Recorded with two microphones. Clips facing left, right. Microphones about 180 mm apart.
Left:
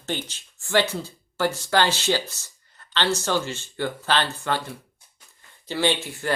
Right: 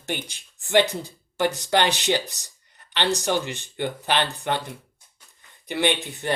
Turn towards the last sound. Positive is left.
turn(degrees=-20)  # may be behind; listen again after turning